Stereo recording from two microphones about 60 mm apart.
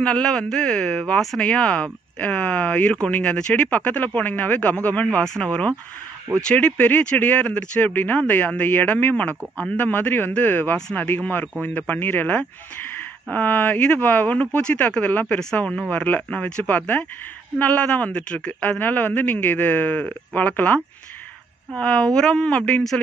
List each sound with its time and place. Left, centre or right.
0.0 s a man's voice: centre
5.4 s a man's voice: centre; by 20.8 s left
21.7 s speech: centre